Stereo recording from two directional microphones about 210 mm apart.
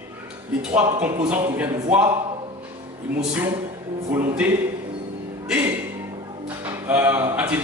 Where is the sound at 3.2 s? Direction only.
5° right (ahead or behind).